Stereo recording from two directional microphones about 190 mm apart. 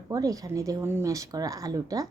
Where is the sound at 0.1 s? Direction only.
20° right (ahead or behind).